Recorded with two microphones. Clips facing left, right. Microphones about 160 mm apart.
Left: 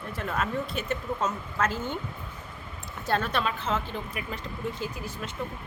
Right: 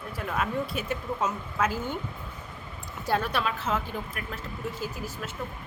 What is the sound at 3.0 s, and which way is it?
A woman's voice, 10° right (ahead or behind).